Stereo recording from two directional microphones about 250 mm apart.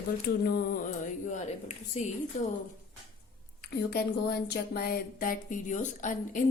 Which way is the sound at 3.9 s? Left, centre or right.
Left.